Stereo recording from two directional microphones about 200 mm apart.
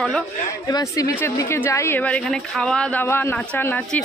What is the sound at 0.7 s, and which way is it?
A woman's voice, 15° left (ahead or behind).